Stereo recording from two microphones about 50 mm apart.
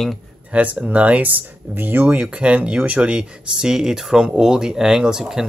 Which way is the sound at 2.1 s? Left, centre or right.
Right.